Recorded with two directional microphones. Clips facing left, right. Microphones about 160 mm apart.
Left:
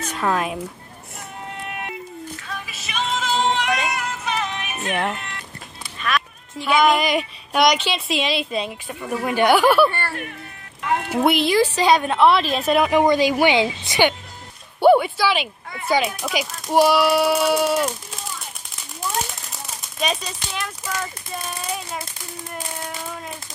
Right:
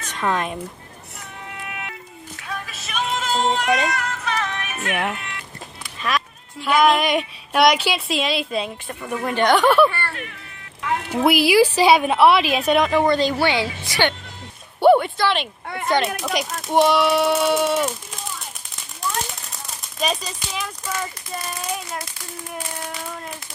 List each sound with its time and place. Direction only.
0.2 s a woman's voice: 5° left (ahead or behind)
1.6 s music: 45° left (ahead or behind)
2.5 s music: 5° left (ahead or behind)
3.9 s music: 15° left (ahead or behind)
5.1 s speech: 35° left (ahead or behind)
6.0 s speech: 25° right (ahead or behind)
6.7 s a woman's voice: centre (ahead or behind)
11.1 s a woman's voice: centre (ahead or behind)
12.9 s speech: 15° left (ahead or behind)
14.8 s a sound: centre (ahead or behind)
15.6 s a sound: 65° right (ahead or behind)
15.9 s a woman's voice: centre (ahead or behind)
19.3 s a sound: centre (ahead or behind)
20.8 s speech: centre (ahead or behind)